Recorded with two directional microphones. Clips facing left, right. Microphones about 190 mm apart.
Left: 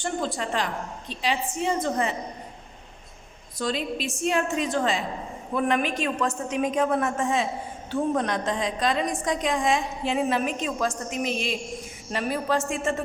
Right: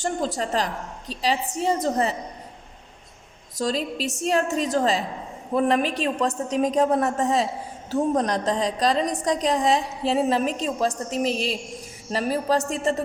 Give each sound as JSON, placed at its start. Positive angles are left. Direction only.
{"t": 0.0, "sound": "a woman's voice", "side_deg": -40}
{"t": 3.6, "sound": "a woman's voice", "side_deg": -40}